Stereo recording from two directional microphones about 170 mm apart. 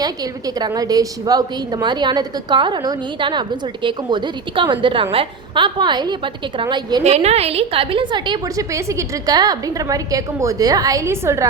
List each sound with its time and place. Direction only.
0.0 s a woman's voice: 20° right (ahead or behind)
7.0 s a woman's voice: 40° right (ahead or behind); by 11.4 s 15° right (ahead or behind)